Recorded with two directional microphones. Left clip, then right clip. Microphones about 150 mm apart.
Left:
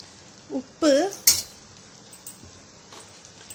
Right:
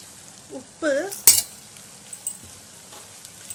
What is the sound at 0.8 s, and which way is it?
Speech, 35° left (ahead or behind).